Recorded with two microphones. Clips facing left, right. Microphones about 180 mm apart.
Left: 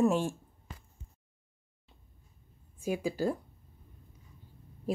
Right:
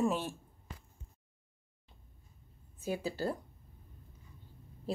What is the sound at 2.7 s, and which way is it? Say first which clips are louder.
Speech: left 4 dB; 10° left (ahead or behind).